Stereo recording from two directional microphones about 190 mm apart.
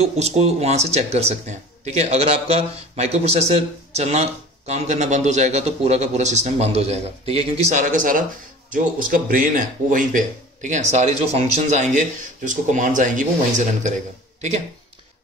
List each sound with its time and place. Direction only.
0.0 s a man's voice: 35° right (ahead or behind)